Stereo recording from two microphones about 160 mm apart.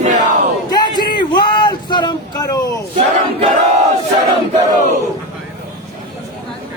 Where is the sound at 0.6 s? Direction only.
25° left (ahead or behind).